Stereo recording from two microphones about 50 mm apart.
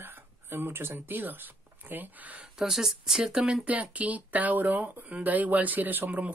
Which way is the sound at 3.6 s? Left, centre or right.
Right.